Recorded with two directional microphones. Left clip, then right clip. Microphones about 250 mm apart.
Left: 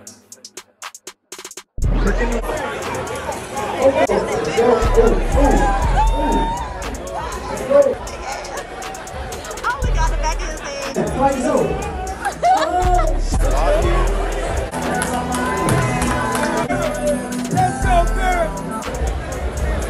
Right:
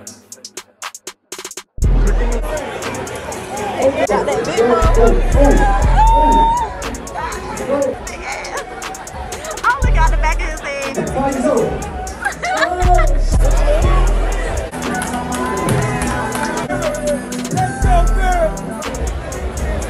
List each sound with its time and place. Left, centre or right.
2.4 s chatter: centre
9.6 s music: centre
12.4 s music: centre
13.3 s music: centre